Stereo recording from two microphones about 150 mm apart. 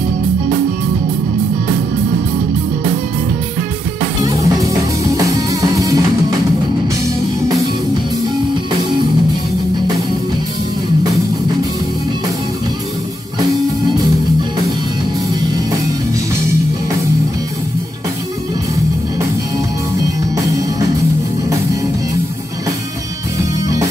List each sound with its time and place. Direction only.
4.2 s music: 20° right (ahead or behind)
20.0 s music: 20° right (ahead or behind)